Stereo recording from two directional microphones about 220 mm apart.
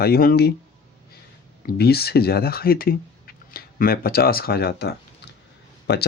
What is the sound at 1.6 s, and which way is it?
Speech, 45° left (ahead or behind).